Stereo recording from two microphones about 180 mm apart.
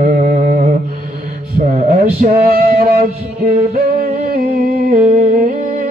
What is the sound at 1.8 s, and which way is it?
Music, 55° right (ahead or behind).